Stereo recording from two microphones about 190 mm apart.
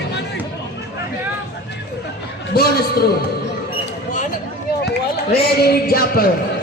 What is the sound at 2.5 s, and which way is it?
Speech, 55° left (ahead or behind).